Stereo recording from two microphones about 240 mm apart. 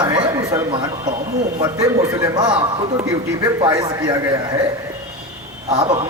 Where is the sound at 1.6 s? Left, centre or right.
Centre.